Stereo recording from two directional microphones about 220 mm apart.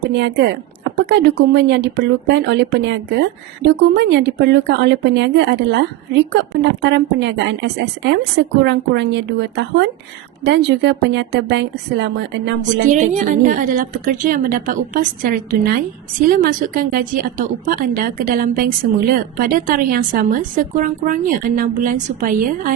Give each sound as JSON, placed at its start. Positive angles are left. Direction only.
{"t": 0.0, "sound": "speech", "side_deg": -50}
{"t": 12.6, "sound": "a woman's voice", "side_deg": -35}